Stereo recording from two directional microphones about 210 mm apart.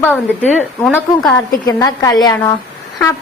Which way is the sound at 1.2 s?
20° left (ahead or behind).